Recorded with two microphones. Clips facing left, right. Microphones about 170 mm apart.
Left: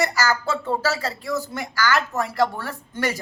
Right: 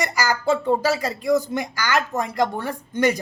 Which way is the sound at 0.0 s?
15° right (ahead or behind).